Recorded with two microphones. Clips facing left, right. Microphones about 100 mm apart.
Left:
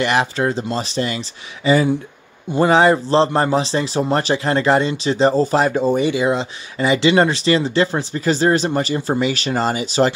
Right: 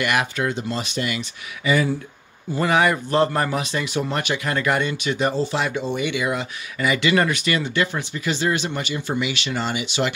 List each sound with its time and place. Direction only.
0.0 s speech: 30° left (ahead or behind)